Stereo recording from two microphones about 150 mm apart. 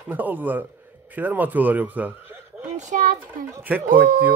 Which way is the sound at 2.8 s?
60° right (ahead or behind).